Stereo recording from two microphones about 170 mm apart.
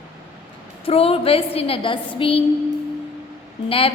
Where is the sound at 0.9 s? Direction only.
35° left (ahead or behind).